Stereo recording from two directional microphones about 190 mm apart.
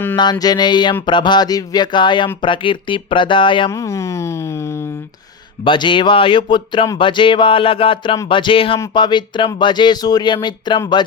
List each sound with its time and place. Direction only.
0.2 s speech: 20° left (ahead or behind)
3.7 s a sound: 15° left (ahead or behind)
5.6 s speech: 25° left (ahead or behind)